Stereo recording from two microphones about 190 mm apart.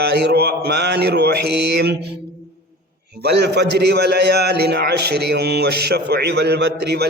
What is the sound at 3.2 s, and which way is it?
A man's voice, 60° right (ahead or behind).